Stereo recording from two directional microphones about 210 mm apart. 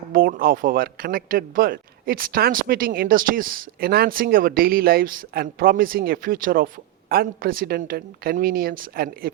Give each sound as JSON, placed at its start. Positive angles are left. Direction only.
{"t": 0.1, "sound": "speech", "side_deg": -45}